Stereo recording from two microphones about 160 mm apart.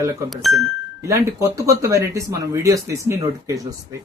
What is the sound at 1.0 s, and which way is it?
A man's voice, 15° right (ahead or behind).